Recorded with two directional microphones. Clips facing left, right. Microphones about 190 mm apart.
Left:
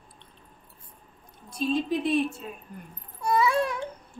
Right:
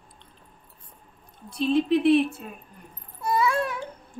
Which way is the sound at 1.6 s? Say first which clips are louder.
Right 5 dB; 70° right (ahead or behind).